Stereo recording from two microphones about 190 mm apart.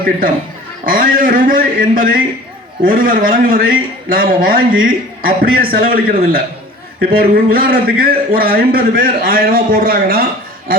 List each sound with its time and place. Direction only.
0.9 s a man's voice: 45° right (ahead or behind)